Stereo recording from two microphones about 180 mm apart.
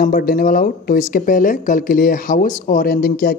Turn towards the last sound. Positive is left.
turn(degrees=55)  # may be behind; listen again after turning